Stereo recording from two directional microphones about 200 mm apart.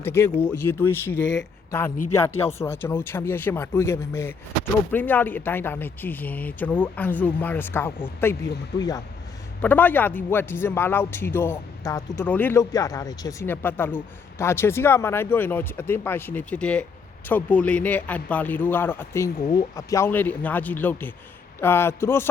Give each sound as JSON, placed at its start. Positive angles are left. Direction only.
{"t": 0.0, "sound": "speech", "side_deg": 10}
{"t": 1.2, "sound": "speech", "side_deg": 60}
{"t": 1.7, "sound": "speech", "side_deg": 10}
{"t": 9.6, "sound": "speech", "side_deg": 10}